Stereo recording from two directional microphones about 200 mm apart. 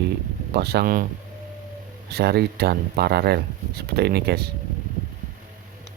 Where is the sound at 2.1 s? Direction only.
50° right (ahead or behind).